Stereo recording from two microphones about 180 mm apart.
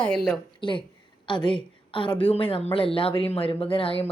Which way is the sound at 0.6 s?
25° left (ahead or behind).